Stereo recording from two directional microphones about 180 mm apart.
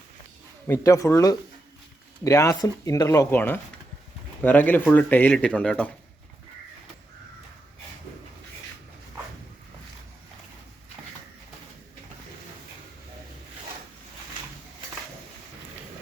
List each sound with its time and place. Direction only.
0.7 s speech: 15° left (ahead or behind)